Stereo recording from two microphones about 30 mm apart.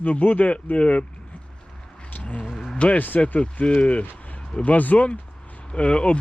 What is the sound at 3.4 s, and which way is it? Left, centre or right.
Speech, left.